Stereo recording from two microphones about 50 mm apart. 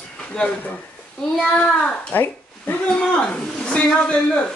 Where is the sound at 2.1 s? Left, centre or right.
Left.